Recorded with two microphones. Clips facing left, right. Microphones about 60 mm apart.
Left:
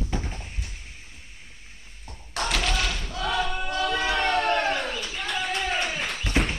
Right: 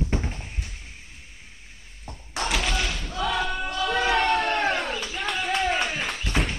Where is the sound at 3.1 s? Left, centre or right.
Right.